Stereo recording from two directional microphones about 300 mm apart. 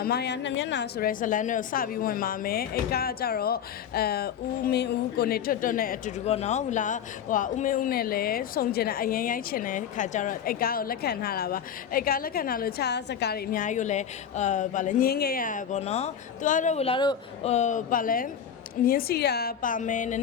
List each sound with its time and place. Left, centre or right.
0.0 s a woman's voice: left